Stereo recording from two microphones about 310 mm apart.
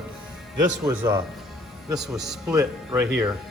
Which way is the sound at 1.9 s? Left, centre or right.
Centre.